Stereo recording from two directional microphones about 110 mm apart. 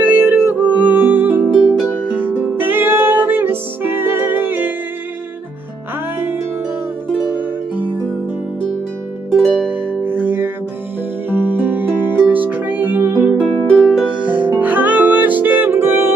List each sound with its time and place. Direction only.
0.0 s music: 10° right (ahead or behind)
6.1 s music: 20° right (ahead or behind)
9.3 s music: 5° left (ahead or behind)
9.7 s music: 20° right (ahead or behind)